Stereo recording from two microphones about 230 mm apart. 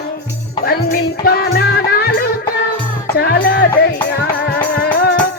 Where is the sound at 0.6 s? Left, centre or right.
Left.